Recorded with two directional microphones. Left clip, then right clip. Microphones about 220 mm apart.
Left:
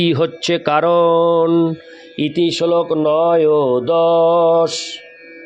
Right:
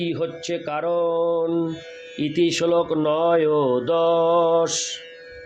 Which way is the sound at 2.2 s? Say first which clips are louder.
Left 4 dB; 25° left (ahead or behind).